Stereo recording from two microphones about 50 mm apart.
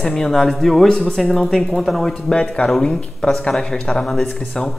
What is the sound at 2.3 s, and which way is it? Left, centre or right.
Speech, centre.